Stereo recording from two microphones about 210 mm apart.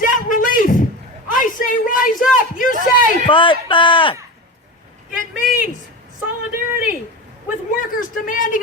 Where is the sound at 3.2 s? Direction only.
25° left (ahead or behind).